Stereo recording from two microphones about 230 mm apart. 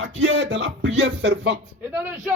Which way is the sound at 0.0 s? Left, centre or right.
Right.